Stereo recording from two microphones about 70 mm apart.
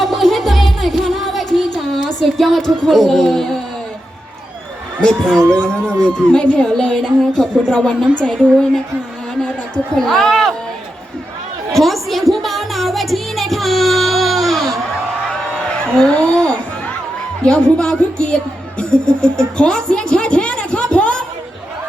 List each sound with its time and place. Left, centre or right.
0.0 s music: centre
4.9 s a woman's voice: centre
11.7 s chatter: centre
12.3 s music: centre
15.3 s a sound: centre
17.4 s speech: centre